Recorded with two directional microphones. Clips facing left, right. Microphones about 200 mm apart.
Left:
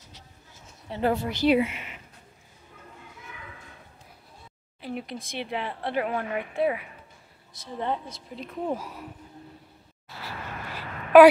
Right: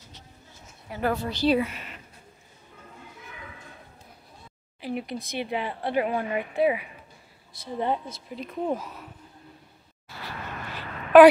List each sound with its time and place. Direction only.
0.8 s a woman's voice: 25° left (ahead or behind)
4.8 s a woman's voice: centre (ahead or behind)
8.7 s speech: 10° left (ahead or behind)
10.0 s a sound: 5° left (ahead or behind)